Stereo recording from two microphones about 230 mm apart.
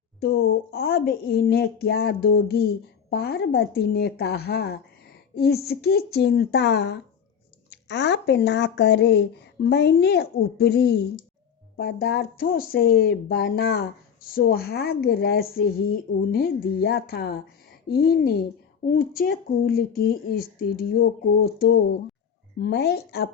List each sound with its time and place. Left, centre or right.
0.2 s speech: left